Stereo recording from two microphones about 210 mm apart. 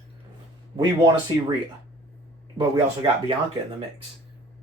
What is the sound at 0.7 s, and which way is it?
Speech, 20° right (ahead or behind).